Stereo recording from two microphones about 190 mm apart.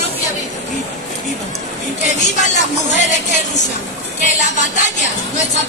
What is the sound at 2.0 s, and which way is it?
Speech, 40° left (ahead or behind).